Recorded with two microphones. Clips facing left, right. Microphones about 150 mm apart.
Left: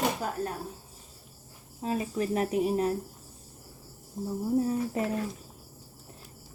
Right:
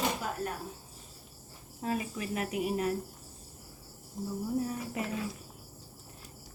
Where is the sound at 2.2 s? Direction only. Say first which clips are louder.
Left 6 dB; 35° left (ahead or behind).